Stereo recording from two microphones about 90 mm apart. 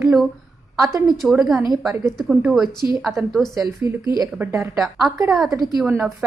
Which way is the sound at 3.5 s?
40° right (ahead or behind).